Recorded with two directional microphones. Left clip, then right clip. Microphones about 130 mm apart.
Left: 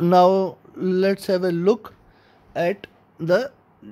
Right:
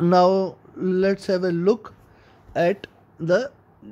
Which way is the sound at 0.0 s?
15° left (ahead or behind).